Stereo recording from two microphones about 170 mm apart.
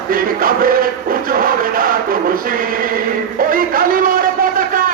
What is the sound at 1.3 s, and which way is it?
Chant, 55° right (ahead or behind).